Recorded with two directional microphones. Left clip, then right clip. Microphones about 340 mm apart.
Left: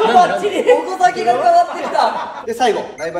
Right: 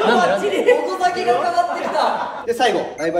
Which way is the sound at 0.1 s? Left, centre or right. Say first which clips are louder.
Left 4 dB; centre.